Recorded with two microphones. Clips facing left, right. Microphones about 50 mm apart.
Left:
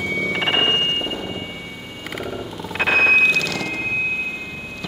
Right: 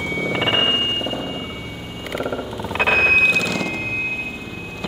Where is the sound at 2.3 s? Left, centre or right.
Centre.